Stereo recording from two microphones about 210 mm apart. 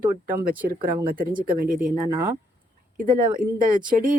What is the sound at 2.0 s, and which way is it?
Speech, 15° right (ahead or behind).